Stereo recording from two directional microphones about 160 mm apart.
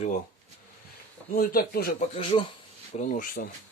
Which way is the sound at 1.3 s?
70° left (ahead or behind).